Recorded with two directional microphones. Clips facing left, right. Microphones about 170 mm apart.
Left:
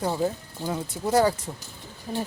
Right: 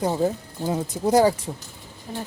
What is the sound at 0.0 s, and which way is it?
Speech, 15° right (ahead or behind).